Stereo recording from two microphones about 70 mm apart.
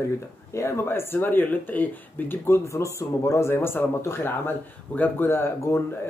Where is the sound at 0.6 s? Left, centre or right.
Left.